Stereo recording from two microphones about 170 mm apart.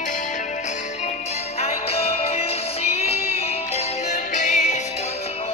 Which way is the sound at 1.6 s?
35° left (ahead or behind).